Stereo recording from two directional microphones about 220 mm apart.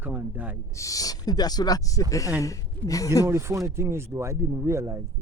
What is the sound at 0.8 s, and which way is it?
A man's voice, 15° left (ahead or behind).